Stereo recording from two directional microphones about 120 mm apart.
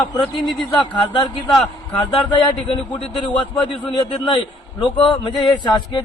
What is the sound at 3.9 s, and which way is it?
A man's voice, 40° left (ahead or behind).